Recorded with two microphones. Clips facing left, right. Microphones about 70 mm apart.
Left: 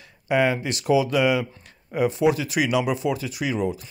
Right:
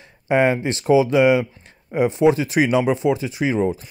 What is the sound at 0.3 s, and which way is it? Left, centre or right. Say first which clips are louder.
Speech: right 4 dB; right.